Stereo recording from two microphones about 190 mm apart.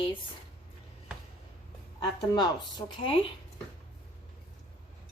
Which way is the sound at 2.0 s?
20° left (ahead or behind).